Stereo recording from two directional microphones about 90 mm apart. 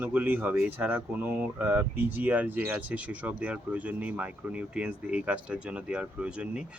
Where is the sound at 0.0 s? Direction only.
20° right (ahead or behind).